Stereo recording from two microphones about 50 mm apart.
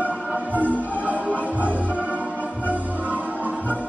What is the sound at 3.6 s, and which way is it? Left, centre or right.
Music, left.